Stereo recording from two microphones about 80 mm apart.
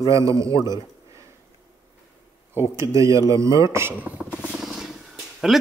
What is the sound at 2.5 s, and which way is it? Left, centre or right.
A man's voice, right.